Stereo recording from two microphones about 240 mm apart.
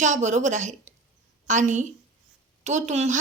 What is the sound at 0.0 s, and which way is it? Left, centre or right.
A woman's voice, right.